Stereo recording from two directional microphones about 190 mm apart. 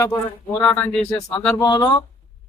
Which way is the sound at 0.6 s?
5° left (ahead or behind).